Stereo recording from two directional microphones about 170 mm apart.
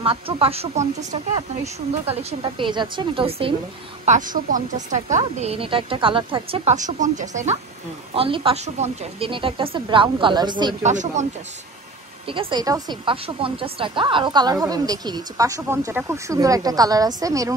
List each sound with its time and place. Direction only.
0.0 s a woman's voice: 35° right (ahead or behind)
4.0 s speech: 45° right (ahead or behind)
8.1 s a woman's voice: 30° right (ahead or behind)
10.8 s speech: 45° right (ahead or behind)
12.3 s a woman's voice: 30° right (ahead or behind)